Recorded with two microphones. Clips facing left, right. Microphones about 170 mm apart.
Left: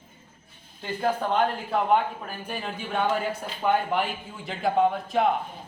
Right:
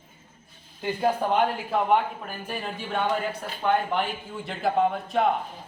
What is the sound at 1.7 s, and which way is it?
Speech, centre (ahead or behind).